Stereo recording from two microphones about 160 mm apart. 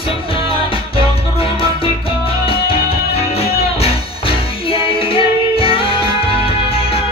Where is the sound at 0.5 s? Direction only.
35° left (ahead or behind).